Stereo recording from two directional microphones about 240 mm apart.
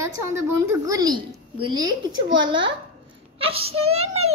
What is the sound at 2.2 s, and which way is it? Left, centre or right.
Speech, right.